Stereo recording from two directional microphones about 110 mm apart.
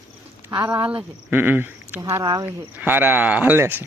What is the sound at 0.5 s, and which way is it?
Speech, 40° right (ahead or behind).